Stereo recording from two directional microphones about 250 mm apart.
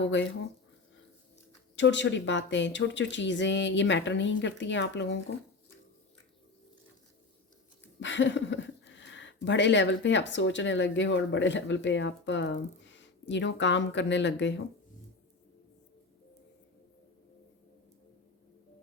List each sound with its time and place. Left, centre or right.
1.7 s speech: left
8.0 s speech: left